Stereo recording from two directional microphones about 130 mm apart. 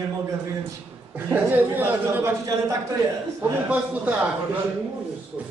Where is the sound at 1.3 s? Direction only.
15° right (ahead or behind).